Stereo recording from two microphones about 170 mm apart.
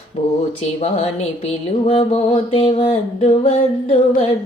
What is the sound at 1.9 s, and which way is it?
Music, 35° left (ahead or behind).